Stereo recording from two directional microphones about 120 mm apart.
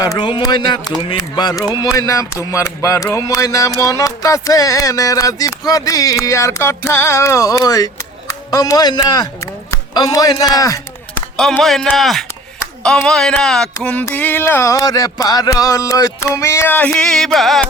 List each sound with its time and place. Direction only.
0.0 s speech: 35° left (ahead or behind)
11.6 s music: 5° left (ahead or behind)
14.1 s speech: 15° left (ahead or behind)
16.9 s music: 5° left (ahead or behind)